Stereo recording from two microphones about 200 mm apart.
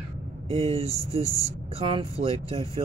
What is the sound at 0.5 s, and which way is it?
Speech, 30° right (ahead or behind).